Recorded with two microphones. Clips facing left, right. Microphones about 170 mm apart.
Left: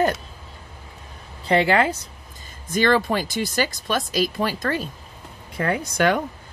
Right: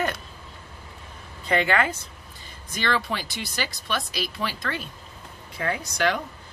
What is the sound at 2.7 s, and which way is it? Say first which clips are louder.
Speech: left 8 dB; 45° left (ahead or behind).